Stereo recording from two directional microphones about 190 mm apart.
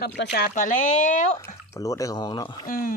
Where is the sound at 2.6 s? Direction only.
45° left (ahead or behind).